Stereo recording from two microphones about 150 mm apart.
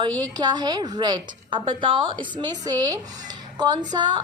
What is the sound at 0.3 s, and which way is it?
A woman's voice, 25° right (ahead or behind).